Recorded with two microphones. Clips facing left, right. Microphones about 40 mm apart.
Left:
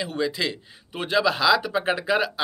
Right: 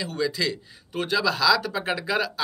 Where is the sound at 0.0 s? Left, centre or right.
Left.